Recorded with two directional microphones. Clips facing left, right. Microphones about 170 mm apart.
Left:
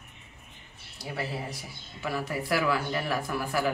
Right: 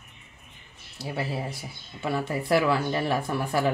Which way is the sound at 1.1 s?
25° right (ahead or behind).